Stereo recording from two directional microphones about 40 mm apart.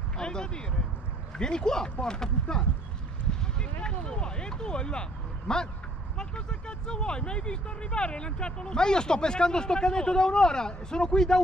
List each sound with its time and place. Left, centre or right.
0.2 s speech: centre
3.5 s a sound: left
5.5 s speech: centre